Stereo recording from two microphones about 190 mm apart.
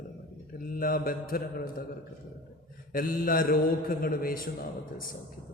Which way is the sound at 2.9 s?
45° left (ahead or behind).